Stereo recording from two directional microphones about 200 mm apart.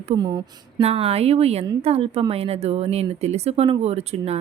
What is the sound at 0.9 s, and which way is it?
A woman's voice, 30° right (ahead or behind).